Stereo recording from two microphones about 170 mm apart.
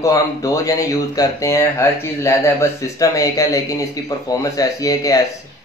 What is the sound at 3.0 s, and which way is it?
Speech, 20° left (ahead or behind).